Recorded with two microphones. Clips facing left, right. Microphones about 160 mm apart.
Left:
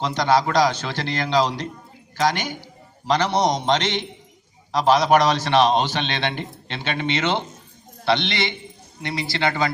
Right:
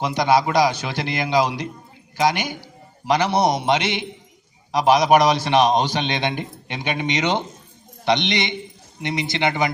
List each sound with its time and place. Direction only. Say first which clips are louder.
0.0 s a man's voice: right 1 dB; 10° right (ahead or behind)